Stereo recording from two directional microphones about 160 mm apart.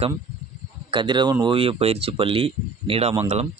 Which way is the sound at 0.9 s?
30° right (ahead or behind).